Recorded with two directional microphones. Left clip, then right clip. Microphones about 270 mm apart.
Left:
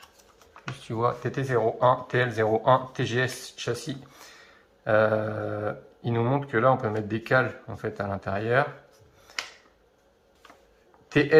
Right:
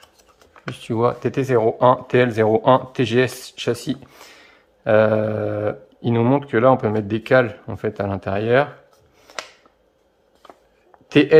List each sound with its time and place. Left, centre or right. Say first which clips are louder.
0.8 s speech: right 7 dB; right
9.3 s a sound: right 2 dB; right
11.1 s speech: right 8 dB; right